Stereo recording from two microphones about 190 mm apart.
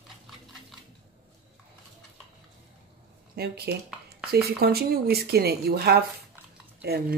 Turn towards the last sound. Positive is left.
turn(degrees=-55)  # may be behind; listen again after turning